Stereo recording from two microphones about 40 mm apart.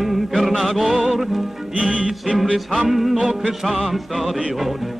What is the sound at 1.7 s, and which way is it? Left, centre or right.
Music, right.